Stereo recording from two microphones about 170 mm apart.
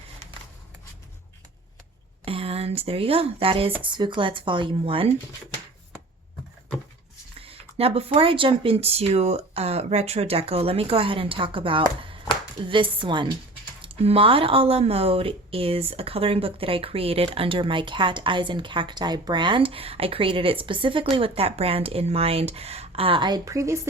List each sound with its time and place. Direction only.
2.2 s speech: 35° right (ahead or behind)
7.8 s speech: 35° right (ahead or behind); by 23.9 s 15° right (ahead or behind)